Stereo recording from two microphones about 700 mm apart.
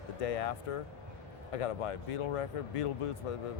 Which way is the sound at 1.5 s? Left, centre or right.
Left.